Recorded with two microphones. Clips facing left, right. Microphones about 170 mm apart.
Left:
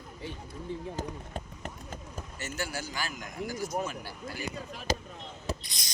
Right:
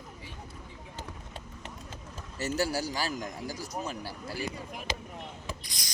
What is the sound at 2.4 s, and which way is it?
A man's voice, 35° right (ahead or behind).